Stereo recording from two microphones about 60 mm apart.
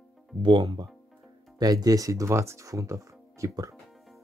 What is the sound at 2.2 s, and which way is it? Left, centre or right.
Speech, right.